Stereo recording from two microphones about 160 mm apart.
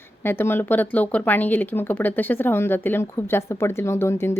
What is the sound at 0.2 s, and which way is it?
A woman's voice, 15° left (ahead or behind).